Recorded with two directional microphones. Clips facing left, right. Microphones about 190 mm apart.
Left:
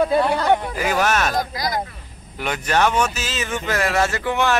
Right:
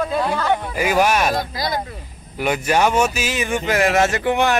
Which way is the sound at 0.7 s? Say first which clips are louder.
Right 3 dB; 10° right (ahead or behind).